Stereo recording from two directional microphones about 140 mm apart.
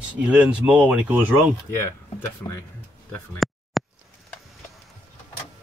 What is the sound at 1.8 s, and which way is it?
Speech, 20° left (ahead or behind).